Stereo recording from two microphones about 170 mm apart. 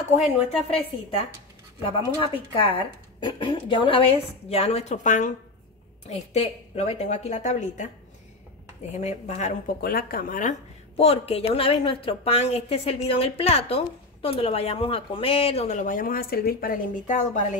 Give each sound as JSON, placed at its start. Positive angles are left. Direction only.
{"t": 0.1, "sound": "a woman's voice", "side_deg": 35}
{"t": 8.9, "sound": "speech", "side_deg": 40}
{"t": 9.8, "sound": "speech", "side_deg": 65}
{"t": 11.0, "sound": "a woman's voice", "side_deg": 35}